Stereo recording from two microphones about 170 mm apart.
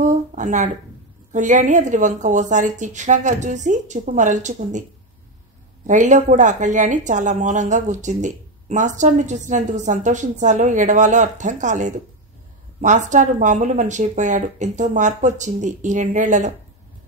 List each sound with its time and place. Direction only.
0.0 s a sound: 45° right (ahead or behind)
1.3 s a woman's voice: 45° right (ahead or behind)
5.9 s a woman's voice: 45° right (ahead or behind)